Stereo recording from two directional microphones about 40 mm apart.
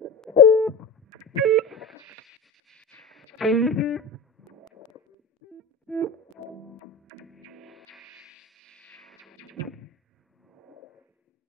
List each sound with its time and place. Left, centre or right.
0.2 s hoot: centre
1.4 s guitar: centre
3.0 s music: centre
5.9 s music: left
7.2 s music: centre
8.6 s music: centre
9.0 s music: centre